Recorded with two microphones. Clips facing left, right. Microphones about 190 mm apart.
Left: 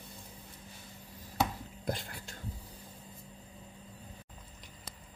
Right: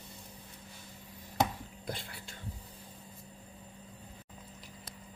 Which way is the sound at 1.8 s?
45° left (ahead or behind).